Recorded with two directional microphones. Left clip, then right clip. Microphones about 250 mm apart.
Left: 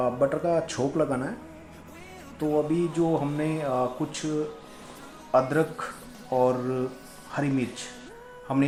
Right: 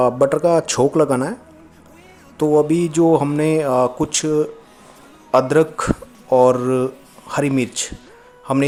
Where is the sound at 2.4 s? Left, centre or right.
Right.